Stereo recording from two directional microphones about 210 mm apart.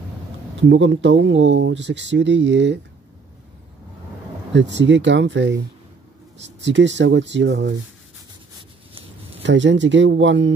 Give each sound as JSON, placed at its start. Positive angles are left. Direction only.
{"t": 0.6, "sound": "speech", "side_deg": -60}
{"t": 4.6, "sound": "speech", "side_deg": -60}
{"t": 9.4, "sound": "speech", "side_deg": -60}